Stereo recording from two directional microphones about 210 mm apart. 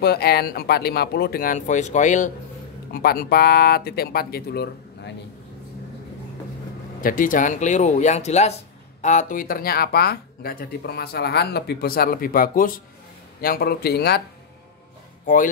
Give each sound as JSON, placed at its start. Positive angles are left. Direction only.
{"t": 0.0, "sound": "speech", "side_deg": 50}
{"t": 2.9, "sound": "speech", "side_deg": 45}
{"t": 7.0, "sound": "speech", "side_deg": 40}